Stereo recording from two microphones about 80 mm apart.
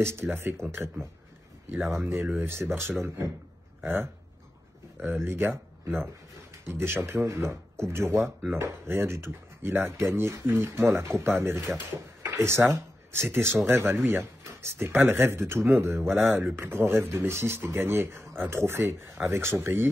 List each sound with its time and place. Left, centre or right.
0.0 s speech: right